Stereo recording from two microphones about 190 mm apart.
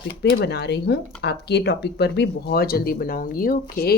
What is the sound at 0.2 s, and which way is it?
Speech, 65° left (ahead or behind).